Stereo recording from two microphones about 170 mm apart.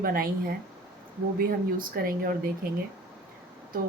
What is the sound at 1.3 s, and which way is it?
Speech, 60° right (ahead or behind).